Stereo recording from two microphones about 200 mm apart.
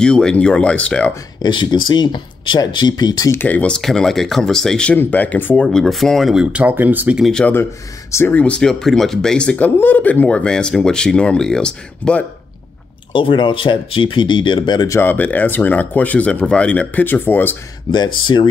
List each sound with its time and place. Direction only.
0.0 s speech: 5° left (ahead or behind)
1.4 s speech: 20° left (ahead or behind); by 12.3 s 5° left (ahead or behind)
13.1 s speech: 25° left (ahead or behind)
17.9 s speech: 25° left (ahead or behind)